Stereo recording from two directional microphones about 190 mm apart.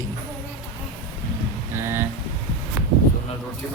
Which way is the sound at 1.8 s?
15° right (ahead or behind).